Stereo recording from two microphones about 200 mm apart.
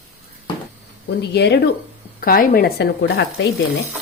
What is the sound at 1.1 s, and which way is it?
Speech, 60° left (ahead or behind).